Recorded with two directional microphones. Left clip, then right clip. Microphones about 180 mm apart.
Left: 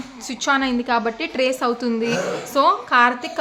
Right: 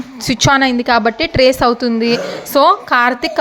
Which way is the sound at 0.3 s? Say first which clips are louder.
Right 8 dB; 45° right (ahead or behind).